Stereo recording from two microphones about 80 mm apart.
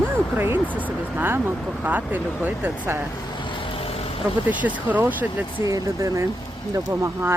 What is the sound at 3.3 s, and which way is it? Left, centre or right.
Vehicle, left.